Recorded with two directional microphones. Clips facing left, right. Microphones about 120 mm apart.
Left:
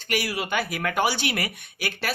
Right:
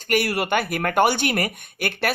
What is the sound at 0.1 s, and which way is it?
Speech, 55° right (ahead or behind).